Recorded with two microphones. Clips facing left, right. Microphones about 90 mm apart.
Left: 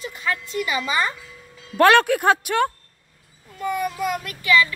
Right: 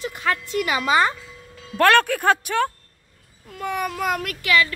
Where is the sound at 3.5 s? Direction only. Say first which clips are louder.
Left 1 dB; 60° right (ahead or behind).